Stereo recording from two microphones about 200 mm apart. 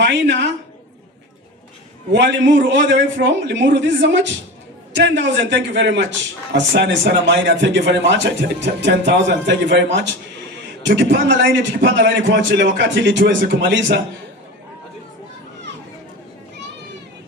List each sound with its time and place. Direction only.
0.0 s a man's voice: 60° right (ahead or behind)
2.1 s a man's voice: 60° right (ahead or behind)